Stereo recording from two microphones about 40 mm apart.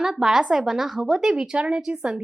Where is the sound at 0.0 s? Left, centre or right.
Centre.